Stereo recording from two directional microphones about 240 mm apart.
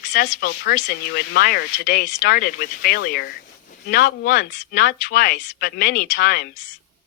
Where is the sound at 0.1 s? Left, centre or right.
Left.